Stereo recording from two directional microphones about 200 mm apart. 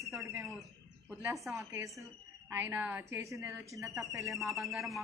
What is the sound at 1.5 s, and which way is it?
A woman's voice, 5° right (ahead or behind).